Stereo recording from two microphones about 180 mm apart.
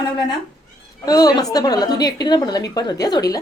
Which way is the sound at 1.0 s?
20° left (ahead or behind).